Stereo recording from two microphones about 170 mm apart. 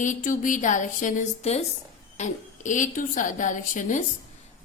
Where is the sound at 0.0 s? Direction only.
50° left (ahead or behind).